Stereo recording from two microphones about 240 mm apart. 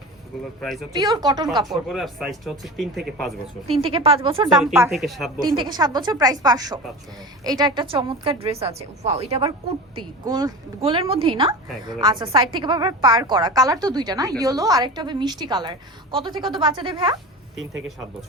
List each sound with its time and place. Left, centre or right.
0.6 s speech: centre
0.9 s a woman's voice: centre
1.6 s speech: centre
3.7 s a woman's voice: right
4.6 s a woman's voice: centre
5.5 s a woman's voice: centre